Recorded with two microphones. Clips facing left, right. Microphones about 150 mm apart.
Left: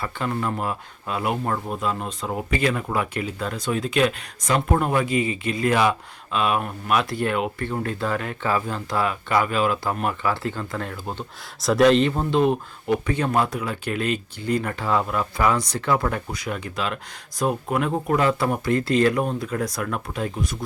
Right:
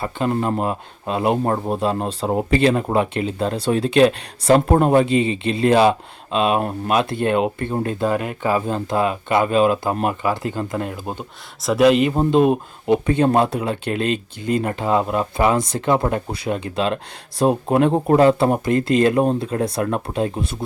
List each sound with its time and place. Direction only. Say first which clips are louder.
0.0 s speech: right 5 dB; 25° right (ahead or behind)
11.6 s speech: right 2 dB; 5° right (ahead or behind)
12.1 s speech: right 5 dB; 20° right (ahead or behind)